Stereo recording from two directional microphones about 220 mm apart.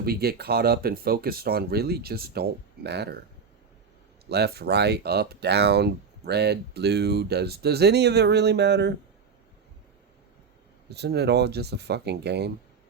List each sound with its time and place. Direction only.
0.0 s speech: 45° right (ahead or behind)
4.3 s speech: 45° right (ahead or behind)
10.8 s speech: 50° right (ahead or behind)